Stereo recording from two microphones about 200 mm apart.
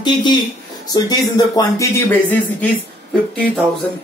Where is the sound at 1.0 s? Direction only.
20° left (ahead or behind).